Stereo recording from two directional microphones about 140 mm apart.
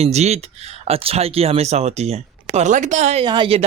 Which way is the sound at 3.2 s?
35° right (ahead or behind).